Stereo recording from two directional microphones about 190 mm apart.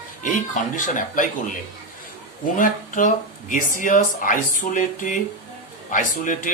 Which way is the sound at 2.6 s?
45° left (ahead or behind).